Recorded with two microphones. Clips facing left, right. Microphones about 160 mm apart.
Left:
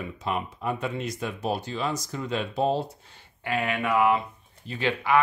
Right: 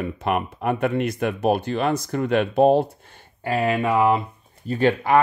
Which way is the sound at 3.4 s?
35° right (ahead or behind).